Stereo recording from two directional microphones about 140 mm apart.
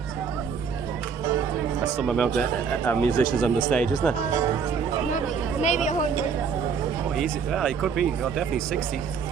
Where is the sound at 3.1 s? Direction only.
35° right (ahead or behind).